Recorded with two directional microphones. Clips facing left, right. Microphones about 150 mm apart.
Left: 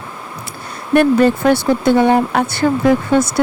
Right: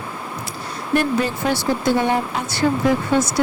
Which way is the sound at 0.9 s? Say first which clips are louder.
Left 8 dB; 55° left (ahead or behind).